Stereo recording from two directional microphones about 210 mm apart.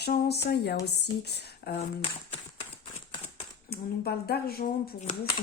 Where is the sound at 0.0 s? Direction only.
50° left (ahead or behind).